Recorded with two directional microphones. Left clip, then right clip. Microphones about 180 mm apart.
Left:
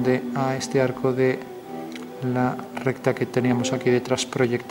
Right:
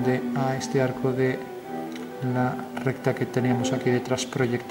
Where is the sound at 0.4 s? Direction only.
Centre (ahead or behind).